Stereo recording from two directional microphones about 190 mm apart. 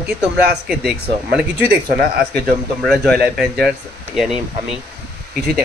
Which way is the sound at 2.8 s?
5° left (ahead or behind).